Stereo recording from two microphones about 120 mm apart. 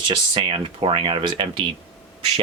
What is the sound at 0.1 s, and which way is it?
Speech, 45° right (ahead or behind).